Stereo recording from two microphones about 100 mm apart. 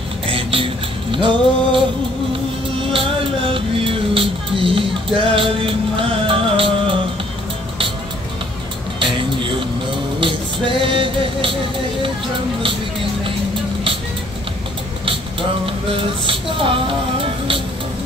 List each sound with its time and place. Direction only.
0.3 s a sound: 65° right (ahead or behind)
1.1 s music: 60° right (ahead or behind)
3.5 s music: 65° right (ahead or behind)
9.0 s music: 60° right (ahead or behind)
15.6 s music: 65° right (ahead or behind)